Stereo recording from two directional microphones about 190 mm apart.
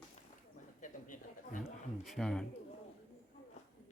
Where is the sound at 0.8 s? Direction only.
45° left (ahead or behind).